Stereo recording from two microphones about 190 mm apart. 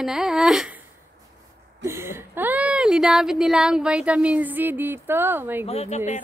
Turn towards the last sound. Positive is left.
turn(degrees=35)  # may be behind; listen again after turning